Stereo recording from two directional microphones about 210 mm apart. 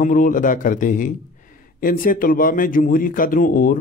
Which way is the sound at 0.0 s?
40° left (ahead or behind).